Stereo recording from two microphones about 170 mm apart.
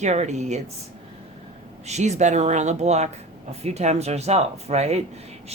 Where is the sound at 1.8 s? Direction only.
40° right (ahead or behind).